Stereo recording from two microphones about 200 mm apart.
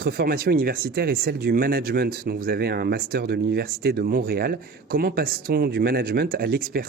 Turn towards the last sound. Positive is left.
turn(degrees=-50)  # may be behind; listen again after turning